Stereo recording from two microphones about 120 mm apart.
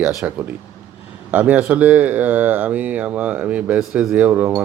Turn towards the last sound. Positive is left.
turn(degrees=-10)  # may be behind; listen again after turning